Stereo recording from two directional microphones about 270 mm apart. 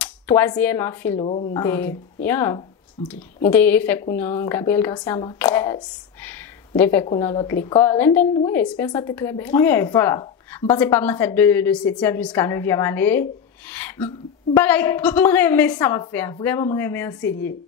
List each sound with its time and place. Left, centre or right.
0.0 s speech: centre
1.2 s a woman's voice: left
1.5 s a woman's voice: centre
6.8 s a woman's voice: centre